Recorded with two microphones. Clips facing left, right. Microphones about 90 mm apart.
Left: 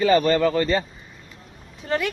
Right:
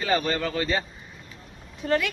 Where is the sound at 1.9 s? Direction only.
25° left (ahead or behind).